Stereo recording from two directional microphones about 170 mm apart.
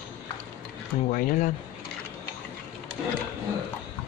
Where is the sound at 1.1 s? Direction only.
50° left (ahead or behind).